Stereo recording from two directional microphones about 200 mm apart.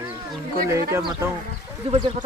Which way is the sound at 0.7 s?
15° right (ahead or behind).